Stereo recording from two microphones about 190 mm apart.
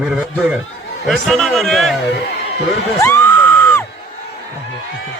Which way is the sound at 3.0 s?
15° left (ahead or behind).